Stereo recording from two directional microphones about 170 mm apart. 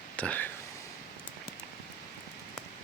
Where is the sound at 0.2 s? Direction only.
10° left (ahead or behind).